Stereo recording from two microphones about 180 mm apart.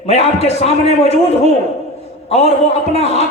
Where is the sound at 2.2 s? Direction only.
35° left (ahead or behind).